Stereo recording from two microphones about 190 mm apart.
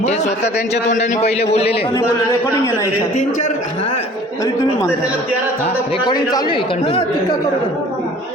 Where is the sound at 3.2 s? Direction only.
40° left (ahead or behind).